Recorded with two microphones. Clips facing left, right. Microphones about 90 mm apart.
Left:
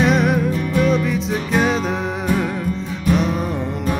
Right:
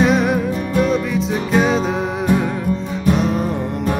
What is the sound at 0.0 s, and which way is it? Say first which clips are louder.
Music: right 1 dB; centre (ahead or behind).